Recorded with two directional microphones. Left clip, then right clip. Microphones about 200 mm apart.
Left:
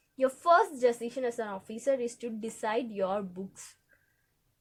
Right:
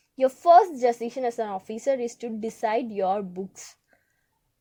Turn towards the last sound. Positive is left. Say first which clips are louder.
# right 7 dB
turn(degrees=-25)  # may be behind; listen again after turning